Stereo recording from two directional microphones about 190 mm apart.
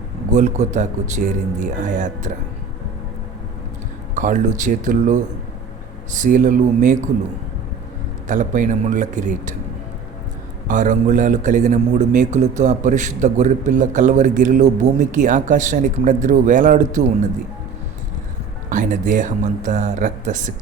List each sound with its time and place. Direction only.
0.3 s a man's voice: 40° right (ahead or behind)
4.1 s a man's voice: 40° right (ahead or behind)
8.3 s a man's voice: 45° right (ahead or behind)
10.7 s a man's voice: 40° right (ahead or behind)
18.7 s speech: 45° right (ahead or behind)